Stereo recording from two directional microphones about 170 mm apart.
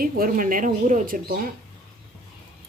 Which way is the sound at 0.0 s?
55° right (ahead or behind).